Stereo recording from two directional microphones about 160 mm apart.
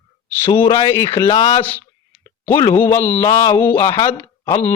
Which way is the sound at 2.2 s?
20° left (ahead or behind).